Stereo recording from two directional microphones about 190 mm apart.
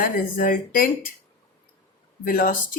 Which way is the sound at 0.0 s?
45° left (ahead or behind).